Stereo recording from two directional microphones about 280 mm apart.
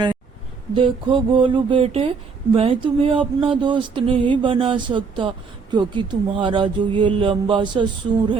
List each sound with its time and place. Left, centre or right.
0.7 s speech: centre